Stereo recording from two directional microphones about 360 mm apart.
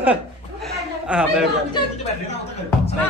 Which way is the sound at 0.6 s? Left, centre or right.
Centre.